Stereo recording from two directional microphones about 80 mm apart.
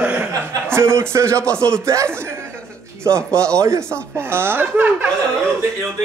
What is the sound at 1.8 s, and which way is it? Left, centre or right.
Speech, right.